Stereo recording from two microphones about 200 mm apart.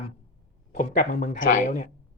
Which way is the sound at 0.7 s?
45° left (ahead or behind).